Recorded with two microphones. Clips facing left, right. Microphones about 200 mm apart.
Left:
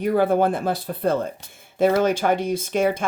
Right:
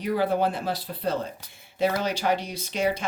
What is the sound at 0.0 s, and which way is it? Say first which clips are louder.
Speech: left 5 dB; 50° left (ahead or behind).